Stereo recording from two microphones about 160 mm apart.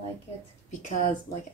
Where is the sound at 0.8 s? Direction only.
50° left (ahead or behind).